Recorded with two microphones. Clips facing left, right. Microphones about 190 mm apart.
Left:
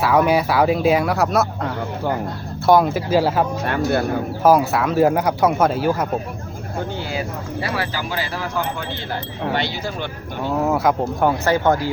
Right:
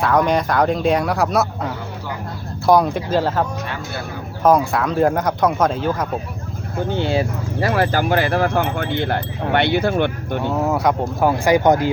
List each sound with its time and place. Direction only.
0.0 s speech: 5° left (ahead or behind)
3.7 s speech: 55° left (ahead or behind)
4.4 s speech: 5° left (ahead or behind)
7.0 s speech: 25° right (ahead or behind)
7.6 s speech: 50° right (ahead or behind)
10.7 s speech: centre (ahead or behind)
11.5 s speech: 15° right (ahead or behind)